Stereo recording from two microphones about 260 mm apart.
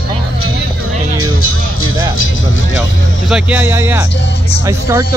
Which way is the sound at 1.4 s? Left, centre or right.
Left.